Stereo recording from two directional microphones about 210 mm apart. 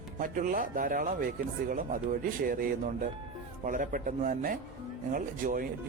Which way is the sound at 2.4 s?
45° right (ahead or behind).